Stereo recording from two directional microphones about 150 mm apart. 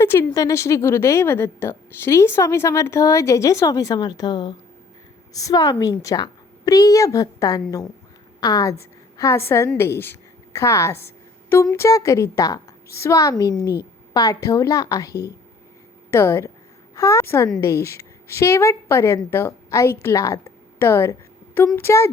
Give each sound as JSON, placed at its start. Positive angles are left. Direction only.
{"t": 0.0, "sound": "a woman's voice", "side_deg": 15}